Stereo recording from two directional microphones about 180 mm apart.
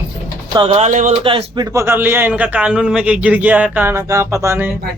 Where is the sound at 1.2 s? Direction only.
30° right (ahead or behind).